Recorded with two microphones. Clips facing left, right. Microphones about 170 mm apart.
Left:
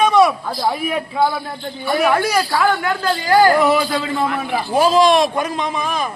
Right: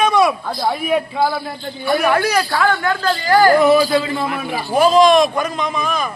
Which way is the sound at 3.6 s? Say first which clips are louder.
Right 3 dB; 15° right (ahead or behind).